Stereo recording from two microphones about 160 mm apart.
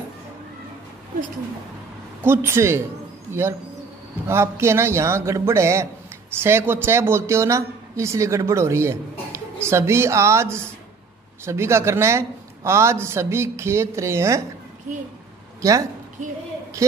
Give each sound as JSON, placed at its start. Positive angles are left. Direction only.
{"t": 2.2, "sound": "a man's voice", "side_deg": -15}
{"t": 15.6, "sound": "a woman's voice", "side_deg": -20}